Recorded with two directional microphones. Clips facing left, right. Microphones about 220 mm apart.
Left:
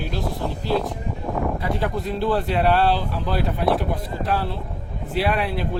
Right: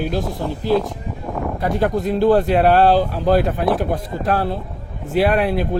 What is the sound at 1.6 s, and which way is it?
Speech, 45° right (ahead or behind).